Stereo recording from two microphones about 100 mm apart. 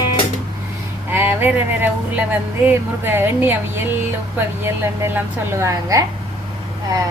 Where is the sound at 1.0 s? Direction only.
20° right (ahead or behind).